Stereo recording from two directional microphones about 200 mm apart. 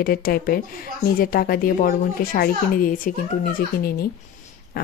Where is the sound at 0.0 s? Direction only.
45° left (ahead or behind).